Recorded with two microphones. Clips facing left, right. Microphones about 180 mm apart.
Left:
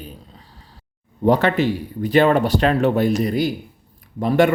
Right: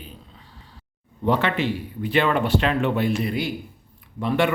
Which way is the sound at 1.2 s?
40° left (ahead or behind).